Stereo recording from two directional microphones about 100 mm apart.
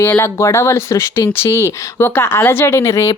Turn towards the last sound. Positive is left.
turn(degrees=30)  # may be behind; listen again after turning